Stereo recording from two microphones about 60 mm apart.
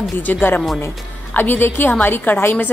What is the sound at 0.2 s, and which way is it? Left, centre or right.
A woman's voice, left.